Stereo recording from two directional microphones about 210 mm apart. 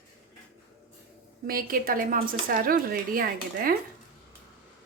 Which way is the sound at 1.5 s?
45° right (ahead or behind).